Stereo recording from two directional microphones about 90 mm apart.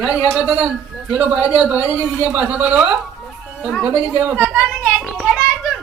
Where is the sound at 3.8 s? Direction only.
25° right (ahead or behind).